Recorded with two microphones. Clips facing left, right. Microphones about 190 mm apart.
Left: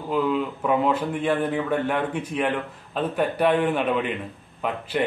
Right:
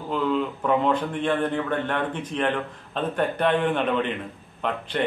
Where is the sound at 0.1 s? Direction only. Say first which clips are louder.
Left 1 dB; 5° left (ahead or behind).